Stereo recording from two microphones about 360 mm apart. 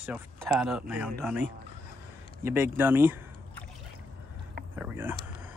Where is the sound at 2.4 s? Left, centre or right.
Centre.